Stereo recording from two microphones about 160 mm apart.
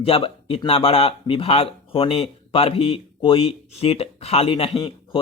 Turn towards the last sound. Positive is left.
turn(degrees=35)  # may be behind; listen again after turning